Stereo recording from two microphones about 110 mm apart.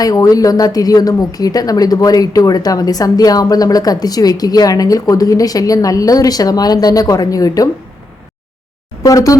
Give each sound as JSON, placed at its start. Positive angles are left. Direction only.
{"t": 0.0, "sound": "a woman's voice", "side_deg": 35}
{"t": 9.0, "sound": "a woman's voice", "side_deg": 30}